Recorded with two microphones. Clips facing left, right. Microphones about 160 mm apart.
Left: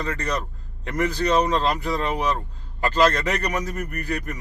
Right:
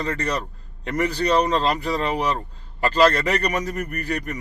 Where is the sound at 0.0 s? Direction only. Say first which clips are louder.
Right 2 dB; 30° right (ahead or behind).